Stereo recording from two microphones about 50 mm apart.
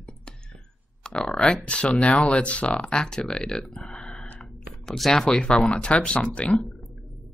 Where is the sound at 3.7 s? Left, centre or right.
Centre.